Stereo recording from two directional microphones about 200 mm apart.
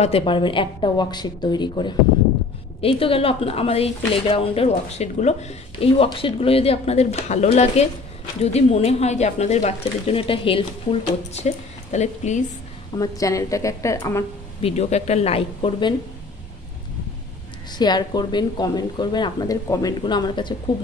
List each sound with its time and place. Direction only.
0.0 s speech: 25° left (ahead or behind)
12.9 s a woman's voice: 15° left (ahead or behind)
14.6 s speech: 35° left (ahead or behind)
17.6 s speech: 20° left (ahead or behind)